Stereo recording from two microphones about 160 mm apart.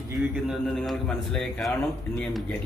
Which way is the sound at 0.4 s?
Centre (ahead or behind).